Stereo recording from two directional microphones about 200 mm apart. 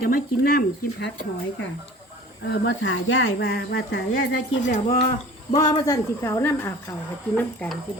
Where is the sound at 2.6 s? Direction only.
65° left (ahead or behind).